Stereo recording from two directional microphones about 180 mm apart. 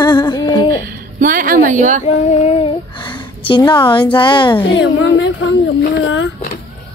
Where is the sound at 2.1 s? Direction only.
35° left (ahead or behind).